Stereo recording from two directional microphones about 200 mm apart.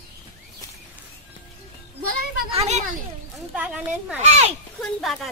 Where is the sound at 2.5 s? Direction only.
35° right (ahead or behind).